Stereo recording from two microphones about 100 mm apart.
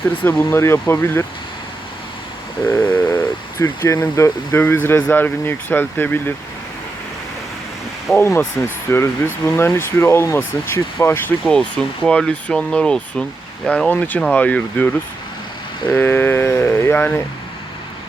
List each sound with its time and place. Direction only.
0.2 s speech: 20° left (ahead or behind)
2.6 s a sound: 15° left (ahead or behind)
3.9 s speech: 30° left (ahead or behind)
8.1 s speech: 30° left (ahead or behind)
11.5 s speech: 5° left (ahead or behind)
15.9 s speech: 20° left (ahead or behind)